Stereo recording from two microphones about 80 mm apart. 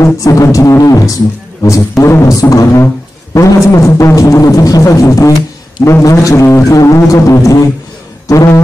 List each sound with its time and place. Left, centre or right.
0.0 s music: left
2.5 s speech: left
3.3 s music: left